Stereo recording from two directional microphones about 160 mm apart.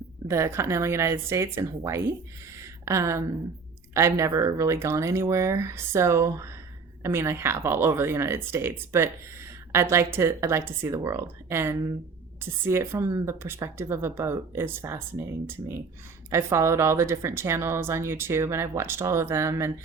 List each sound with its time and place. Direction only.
0.3 s speech: 15° right (ahead or behind)
2.6 s a sound: 20° right (ahead or behind)
3.9 s speech: 20° right (ahead or behind)
16.3 s speech: 15° right (ahead or behind)